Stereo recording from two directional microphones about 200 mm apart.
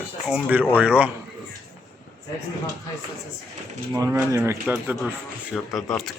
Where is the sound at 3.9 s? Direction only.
15° right (ahead or behind).